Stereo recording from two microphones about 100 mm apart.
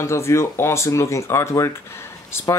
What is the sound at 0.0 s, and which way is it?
Speech, 25° left (ahead or behind).